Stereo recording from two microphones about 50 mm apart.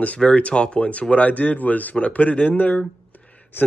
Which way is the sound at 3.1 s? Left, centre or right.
Left.